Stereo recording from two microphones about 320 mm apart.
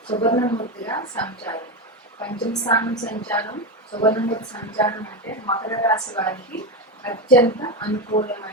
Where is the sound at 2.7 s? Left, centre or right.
Centre.